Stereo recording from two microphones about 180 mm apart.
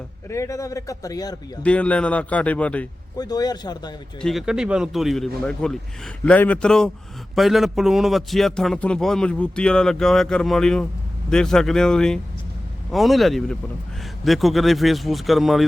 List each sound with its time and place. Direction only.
0.3 s a man's voice: 15° left (ahead or behind)
1.6 s a man's voice: 5° left (ahead or behind)
3.2 s speech: 20° left (ahead or behind)
4.2 s a man's voice: centre (ahead or behind)